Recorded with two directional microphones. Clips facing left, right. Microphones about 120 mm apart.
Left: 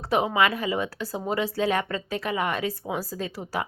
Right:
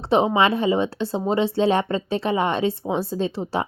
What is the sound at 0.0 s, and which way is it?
A woman's voice, 25° right (ahead or behind).